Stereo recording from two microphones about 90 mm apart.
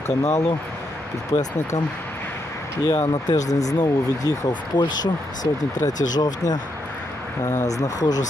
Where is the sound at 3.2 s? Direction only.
45° left (ahead or behind).